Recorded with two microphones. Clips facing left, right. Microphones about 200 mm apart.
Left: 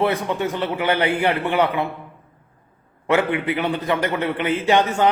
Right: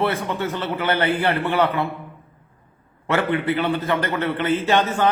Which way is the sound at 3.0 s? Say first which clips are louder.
Left 1 dB; 15° left (ahead or behind).